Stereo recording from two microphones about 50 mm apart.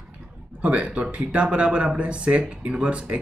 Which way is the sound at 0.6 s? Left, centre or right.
Right.